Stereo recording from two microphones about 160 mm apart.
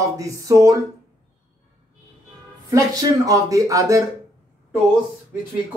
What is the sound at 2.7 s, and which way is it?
Speech, 20° right (ahead or behind).